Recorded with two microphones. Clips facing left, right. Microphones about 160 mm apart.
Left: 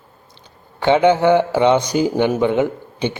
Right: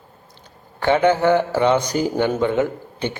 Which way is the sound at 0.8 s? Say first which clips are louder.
Left 3 dB; 15° left (ahead or behind).